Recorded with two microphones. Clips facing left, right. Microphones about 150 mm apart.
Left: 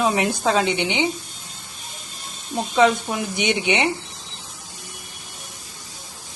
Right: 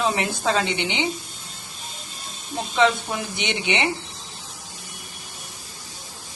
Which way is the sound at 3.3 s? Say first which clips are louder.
Left 5 dB; 15° left (ahead or behind).